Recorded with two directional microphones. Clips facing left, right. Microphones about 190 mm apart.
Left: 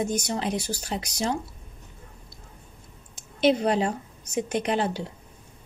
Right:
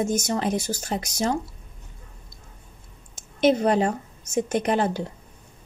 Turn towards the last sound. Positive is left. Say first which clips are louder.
# right 3 dB
turn(degrees=-50)  # may be behind; listen again after turning